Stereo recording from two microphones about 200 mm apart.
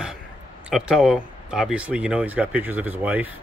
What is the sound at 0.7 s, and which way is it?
Speech, centre (ahead or behind).